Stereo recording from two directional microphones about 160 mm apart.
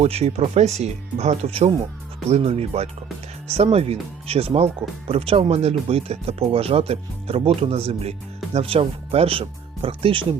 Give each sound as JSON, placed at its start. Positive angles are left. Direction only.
{"t": 0.0, "sound": "speech", "side_deg": -40}